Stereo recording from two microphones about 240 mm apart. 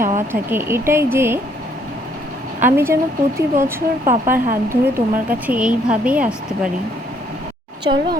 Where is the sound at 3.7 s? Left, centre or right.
Centre.